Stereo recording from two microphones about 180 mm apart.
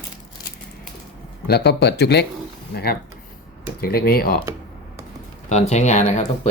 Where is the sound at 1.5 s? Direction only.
65° left (ahead or behind).